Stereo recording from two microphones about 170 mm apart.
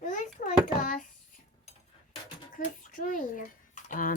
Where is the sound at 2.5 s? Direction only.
50° left (ahead or behind).